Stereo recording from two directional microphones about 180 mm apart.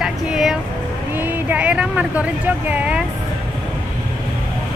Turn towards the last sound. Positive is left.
turn(degrees=-5)  # may be behind; listen again after turning